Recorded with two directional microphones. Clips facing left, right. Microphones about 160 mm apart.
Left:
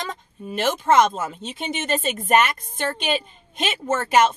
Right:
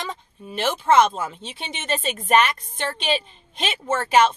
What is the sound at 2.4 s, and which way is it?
Speech, 45° left (ahead or behind).